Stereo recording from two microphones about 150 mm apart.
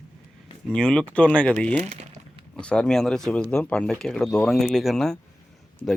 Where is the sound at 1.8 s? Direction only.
50° right (ahead or behind).